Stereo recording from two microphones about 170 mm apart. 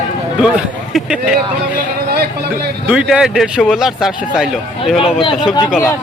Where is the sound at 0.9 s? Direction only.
5° right (ahead or behind).